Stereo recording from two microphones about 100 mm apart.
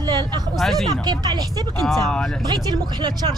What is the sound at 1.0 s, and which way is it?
Speech, 40° right (ahead or behind).